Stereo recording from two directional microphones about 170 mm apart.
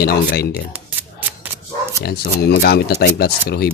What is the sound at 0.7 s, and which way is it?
Scissors, 10° right (ahead or behind).